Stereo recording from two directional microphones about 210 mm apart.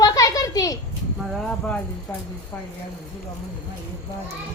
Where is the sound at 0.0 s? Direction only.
15° left (ahead or behind).